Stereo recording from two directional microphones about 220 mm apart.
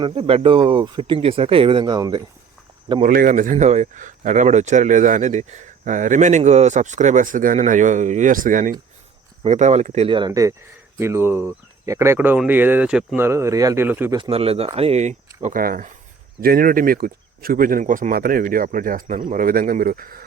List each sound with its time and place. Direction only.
0.0 s speech: 25° right (ahead or behind)
3.0 s speech: 40° right (ahead or behind); by 14.2 s 10° right (ahead or behind)
14.2 s speech: 25° right (ahead or behind)